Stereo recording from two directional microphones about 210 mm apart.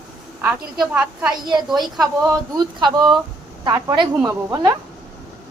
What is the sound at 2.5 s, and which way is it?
A woman's voice, 20° right (ahead or behind).